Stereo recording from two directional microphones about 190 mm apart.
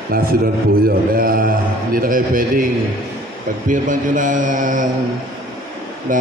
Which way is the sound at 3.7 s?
45° right (ahead or behind).